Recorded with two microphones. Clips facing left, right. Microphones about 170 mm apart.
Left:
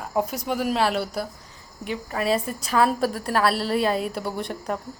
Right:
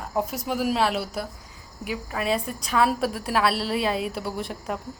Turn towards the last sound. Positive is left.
turn(degrees=0)  # may be behind; listen again after turning